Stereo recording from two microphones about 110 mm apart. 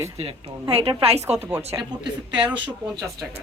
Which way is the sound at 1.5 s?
25° right (ahead or behind).